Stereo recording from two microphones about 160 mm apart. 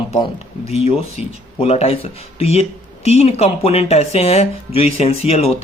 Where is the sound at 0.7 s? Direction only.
40° left (ahead or behind).